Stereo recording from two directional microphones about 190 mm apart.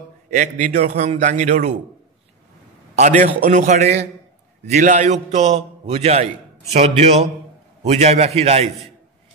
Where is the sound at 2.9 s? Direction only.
40° right (ahead or behind).